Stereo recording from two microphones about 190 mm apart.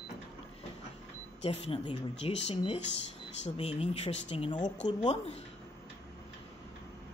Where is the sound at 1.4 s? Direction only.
30° left (ahead or behind).